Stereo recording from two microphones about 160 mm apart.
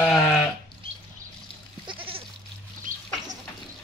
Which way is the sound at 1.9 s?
35° right (ahead or behind).